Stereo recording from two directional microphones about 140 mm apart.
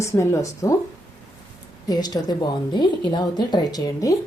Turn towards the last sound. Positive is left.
turn(degrees=25)  # may be behind; listen again after turning